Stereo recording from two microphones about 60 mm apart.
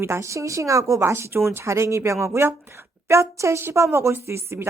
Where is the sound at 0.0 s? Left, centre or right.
Right.